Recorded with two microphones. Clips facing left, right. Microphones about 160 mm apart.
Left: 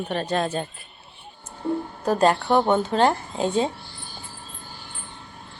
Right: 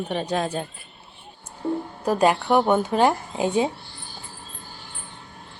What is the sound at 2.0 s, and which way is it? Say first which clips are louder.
A woman's voice: even; 10° right (ahead or behind).